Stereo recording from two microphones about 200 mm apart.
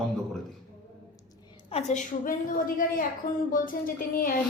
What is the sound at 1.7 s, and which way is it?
A woman's voice, 35° left (ahead or behind).